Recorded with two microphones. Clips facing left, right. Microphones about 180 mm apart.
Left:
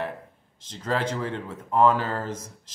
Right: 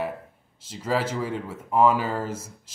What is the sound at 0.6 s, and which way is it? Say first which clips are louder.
Speech: right 1 dB; 5° right (ahead or behind).